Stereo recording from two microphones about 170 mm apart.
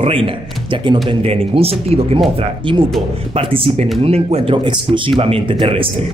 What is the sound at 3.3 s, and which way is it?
Speech, 30° right (ahead or behind).